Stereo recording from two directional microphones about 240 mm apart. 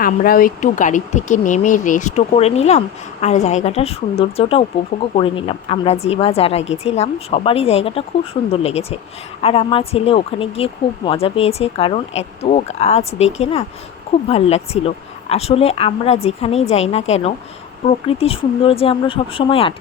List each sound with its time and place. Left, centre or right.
0.0 s speech: left